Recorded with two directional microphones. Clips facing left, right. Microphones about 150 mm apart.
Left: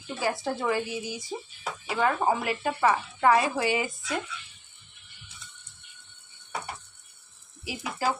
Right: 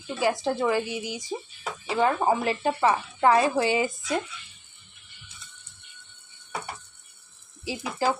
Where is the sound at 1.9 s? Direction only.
25° right (ahead or behind).